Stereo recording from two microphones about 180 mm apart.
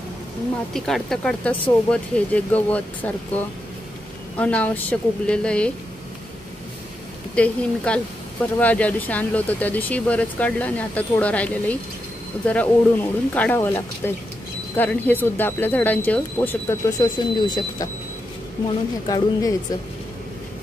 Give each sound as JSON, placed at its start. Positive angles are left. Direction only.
{"t": 0.7, "sound": "speech", "side_deg": 0}
{"t": 4.4, "sound": "speech", "side_deg": 5}
{"t": 7.3, "sound": "speech", "side_deg": 5}
{"t": 19.0, "sound": "speech", "side_deg": 20}